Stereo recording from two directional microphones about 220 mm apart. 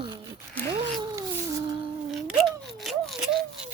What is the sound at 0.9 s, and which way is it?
Cat, 15° right (ahead or behind).